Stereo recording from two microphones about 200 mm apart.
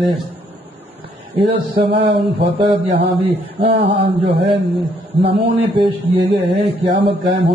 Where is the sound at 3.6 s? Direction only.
55° right (ahead or behind).